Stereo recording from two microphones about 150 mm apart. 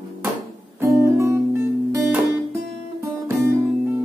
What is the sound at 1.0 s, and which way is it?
Guitar, 15° right (ahead or behind).